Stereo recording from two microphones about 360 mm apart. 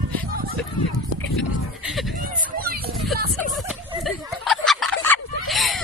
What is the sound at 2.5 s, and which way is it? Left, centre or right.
Children playing, right.